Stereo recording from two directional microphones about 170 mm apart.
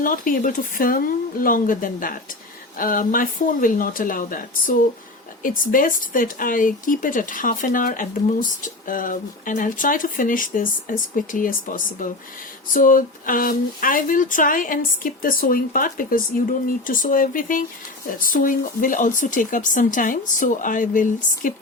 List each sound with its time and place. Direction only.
0.0 s speech: 55° left (ahead or behind)